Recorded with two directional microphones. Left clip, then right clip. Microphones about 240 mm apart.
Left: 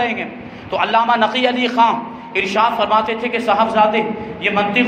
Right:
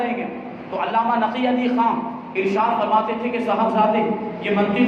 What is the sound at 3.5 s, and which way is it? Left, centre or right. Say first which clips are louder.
Speech: left 7 dB; left.